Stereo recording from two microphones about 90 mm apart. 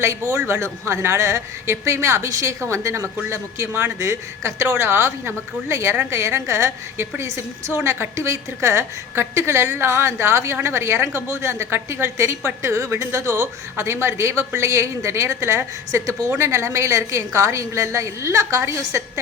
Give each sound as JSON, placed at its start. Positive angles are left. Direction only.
{"t": 0.0, "sound": "a woman's voice", "side_deg": -35}